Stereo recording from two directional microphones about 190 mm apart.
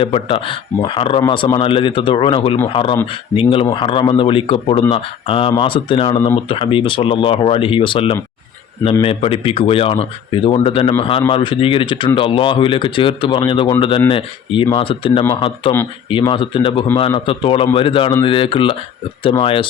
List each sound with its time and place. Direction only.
0.0 s speech: 30° left (ahead or behind)